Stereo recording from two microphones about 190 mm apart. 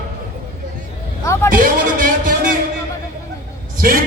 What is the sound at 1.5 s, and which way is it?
Music, 45° right (ahead or behind).